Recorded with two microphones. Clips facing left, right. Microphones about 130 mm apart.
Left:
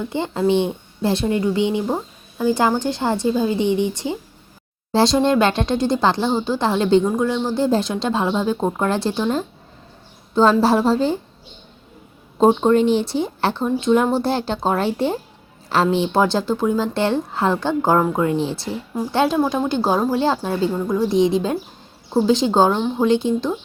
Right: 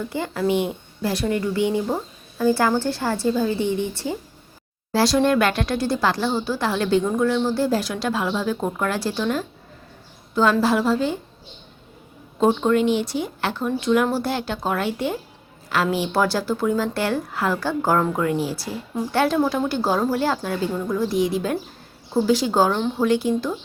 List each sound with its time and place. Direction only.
0.1 s speech: 25° left (ahead or behind)
12.5 s speech: 30° left (ahead or behind)